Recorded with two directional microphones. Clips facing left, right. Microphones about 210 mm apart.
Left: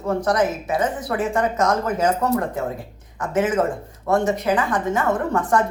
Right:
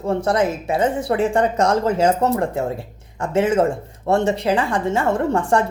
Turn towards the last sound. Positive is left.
turn(degrees=-30)  # may be behind; listen again after turning